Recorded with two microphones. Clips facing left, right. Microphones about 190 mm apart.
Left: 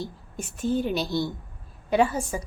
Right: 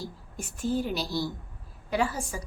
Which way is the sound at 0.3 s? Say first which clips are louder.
Left 3 dB; 20° left (ahead or behind).